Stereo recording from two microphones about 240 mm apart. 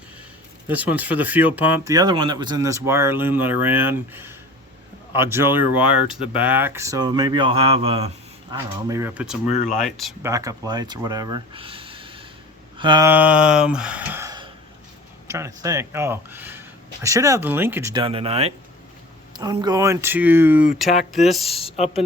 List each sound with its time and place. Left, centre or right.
0.7 s speech: centre
10.2 s speech: centre
12.7 s a sound: centre
13.1 s music: centre
15.3 s speech: centre
21.5 s speech: left